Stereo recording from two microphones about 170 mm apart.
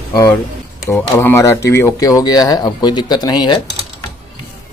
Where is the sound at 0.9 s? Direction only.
15° left (ahead or behind).